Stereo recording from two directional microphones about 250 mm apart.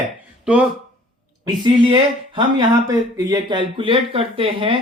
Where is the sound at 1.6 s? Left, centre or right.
Centre.